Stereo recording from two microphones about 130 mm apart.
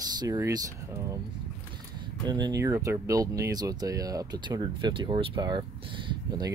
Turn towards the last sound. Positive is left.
turn(degrees=-35)  # may be behind; listen again after turning